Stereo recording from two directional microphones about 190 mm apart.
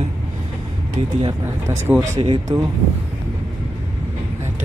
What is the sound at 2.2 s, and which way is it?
Speech, 25° right (ahead or behind).